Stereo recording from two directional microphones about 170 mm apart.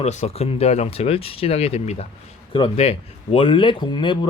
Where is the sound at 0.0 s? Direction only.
40° left (ahead or behind).